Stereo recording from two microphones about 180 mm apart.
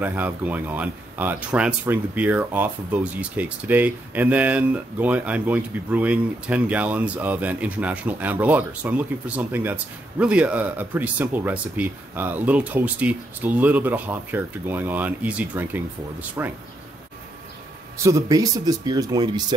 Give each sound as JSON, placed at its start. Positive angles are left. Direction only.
{"t": 0.0, "sound": "speech", "side_deg": -10}
{"t": 18.0, "sound": "speech", "side_deg": -20}